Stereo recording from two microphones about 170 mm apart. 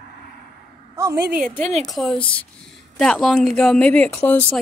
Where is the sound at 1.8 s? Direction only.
Centre (ahead or behind).